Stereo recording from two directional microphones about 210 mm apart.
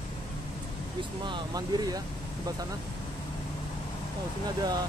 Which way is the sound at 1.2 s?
20° right (ahead or behind).